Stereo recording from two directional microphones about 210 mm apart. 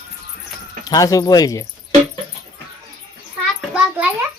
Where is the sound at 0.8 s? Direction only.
15° left (ahead or behind).